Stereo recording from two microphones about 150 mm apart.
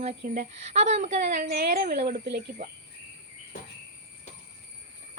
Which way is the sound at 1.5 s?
90° right.